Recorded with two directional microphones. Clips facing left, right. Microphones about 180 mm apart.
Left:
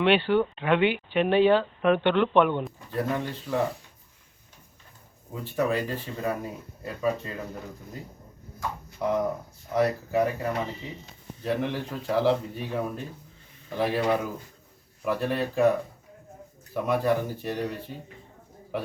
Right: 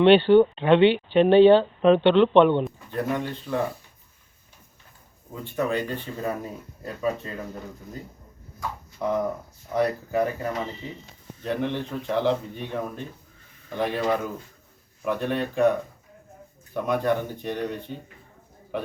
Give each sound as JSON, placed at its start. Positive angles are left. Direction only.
{"t": 0.0, "sound": "speech", "side_deg": -30}
{"t": 2.6, "sound": "speech", "side_deg": 0}
{"t": 5.3, "sound": "speech", "side_deg": 0}
{"t": 9.0, "sound": "speech", "side_deg": 0}